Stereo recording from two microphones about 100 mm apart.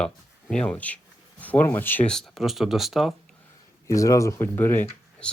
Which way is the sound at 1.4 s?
15° left (ahead or behind).